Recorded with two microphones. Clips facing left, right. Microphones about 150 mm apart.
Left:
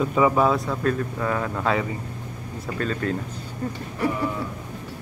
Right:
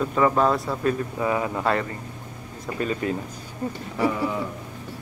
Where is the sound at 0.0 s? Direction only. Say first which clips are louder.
Left 1 dB; 5° left (ahead or behind); by 3.2 s 10° right (ahead or behind).